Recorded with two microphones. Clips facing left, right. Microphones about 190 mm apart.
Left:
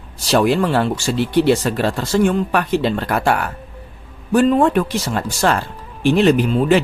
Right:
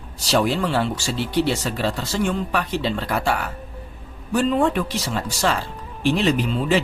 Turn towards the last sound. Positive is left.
turn(degrees=55)  # may be behind; listen again after turning